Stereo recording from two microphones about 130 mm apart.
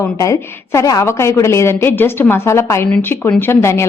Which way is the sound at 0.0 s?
20° left (ahead or behind).